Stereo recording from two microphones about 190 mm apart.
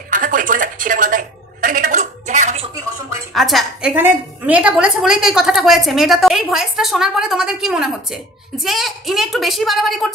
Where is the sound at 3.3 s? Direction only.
Centre (ahead or behind).